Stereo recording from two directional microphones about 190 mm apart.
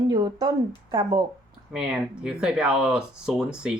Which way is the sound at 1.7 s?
5° right (ahead or behind).